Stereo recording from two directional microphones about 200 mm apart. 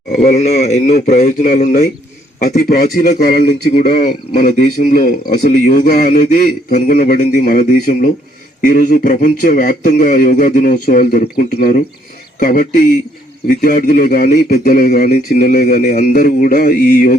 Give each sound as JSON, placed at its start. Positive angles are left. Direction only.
{"t": 0.2, "sound": "a man's voice", "side_deg": 35}
{"t": 2.4, "sound": "a man's voice", "side_deg": 45}